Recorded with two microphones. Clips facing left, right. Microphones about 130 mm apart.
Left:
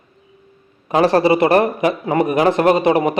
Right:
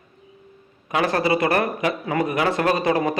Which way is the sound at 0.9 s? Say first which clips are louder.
Left 7 dB; 30° left (ahead or behind).